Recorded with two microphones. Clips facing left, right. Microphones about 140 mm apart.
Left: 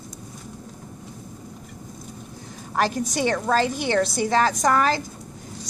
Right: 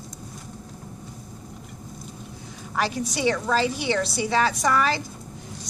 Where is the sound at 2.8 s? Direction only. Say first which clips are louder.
Left 3 dB; 45° left (ahead or behind).